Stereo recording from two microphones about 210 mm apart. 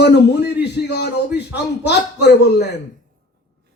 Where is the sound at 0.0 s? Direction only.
50° left (ahead or behind).